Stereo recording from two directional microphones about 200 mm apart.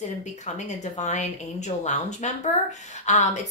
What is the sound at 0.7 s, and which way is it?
A woman's voice, 35° left (ahead or behind).